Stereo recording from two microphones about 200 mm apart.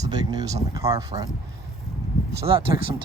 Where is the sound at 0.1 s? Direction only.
20° right (ahead or behind).